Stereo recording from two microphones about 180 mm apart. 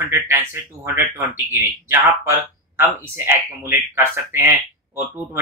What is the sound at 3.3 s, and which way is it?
Speech, 15° right (ahead or behind).